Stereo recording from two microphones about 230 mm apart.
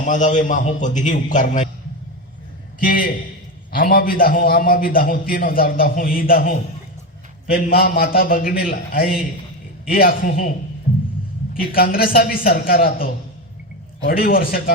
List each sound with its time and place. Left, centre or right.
0.0 s a man's voice: left
2.8 s a man's voice: left
7.5 s a man's voice: left
11.7 s a man's voice: left